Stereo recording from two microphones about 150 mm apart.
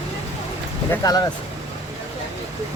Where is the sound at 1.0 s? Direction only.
25° left (ahead or behind).